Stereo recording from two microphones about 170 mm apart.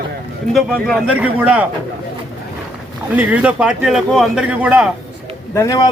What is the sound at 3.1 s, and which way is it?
Speech, 10° right (ahead or behind).